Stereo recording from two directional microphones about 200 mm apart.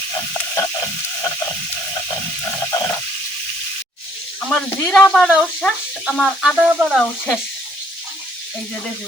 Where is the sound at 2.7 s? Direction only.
20° left (ahead or behind).